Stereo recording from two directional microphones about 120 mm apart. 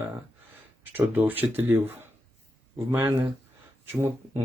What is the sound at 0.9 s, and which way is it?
Speech, 15° right (ahead or behind).